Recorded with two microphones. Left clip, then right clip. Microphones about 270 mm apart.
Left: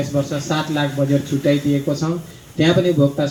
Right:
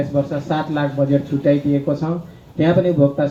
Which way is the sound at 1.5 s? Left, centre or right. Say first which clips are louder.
Right 1 dB; left.